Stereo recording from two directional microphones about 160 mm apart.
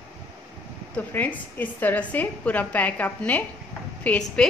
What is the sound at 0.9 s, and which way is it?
A woman's voice, 10° left (ahead or behind).